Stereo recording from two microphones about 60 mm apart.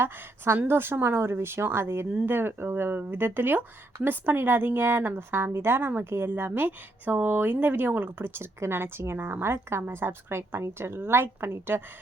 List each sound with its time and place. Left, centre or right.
0.0 s a woman's voice: right